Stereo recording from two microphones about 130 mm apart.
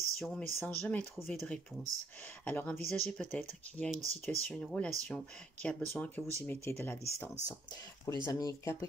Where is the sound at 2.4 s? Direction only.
15° left (ahead or behind).